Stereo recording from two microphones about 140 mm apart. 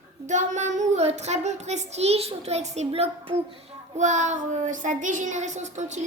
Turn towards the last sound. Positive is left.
turn(degrees=-55)  # may be behind; listen again after turning